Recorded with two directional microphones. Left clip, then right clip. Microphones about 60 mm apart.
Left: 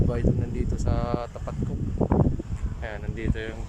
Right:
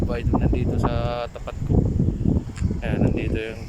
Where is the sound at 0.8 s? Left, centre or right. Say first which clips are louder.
Right 2 dB; centre.